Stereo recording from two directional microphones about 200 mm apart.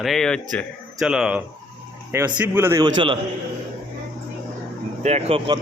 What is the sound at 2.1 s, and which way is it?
Mantra, 10° right (ahead or behind).